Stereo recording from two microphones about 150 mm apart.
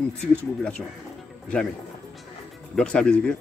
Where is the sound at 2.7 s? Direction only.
5° left (ahead or behind).